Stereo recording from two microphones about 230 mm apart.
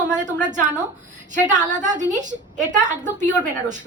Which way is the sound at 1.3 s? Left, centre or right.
Right.